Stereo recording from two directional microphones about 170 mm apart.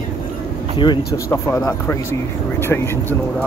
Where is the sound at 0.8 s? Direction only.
25° left (ahead or behind).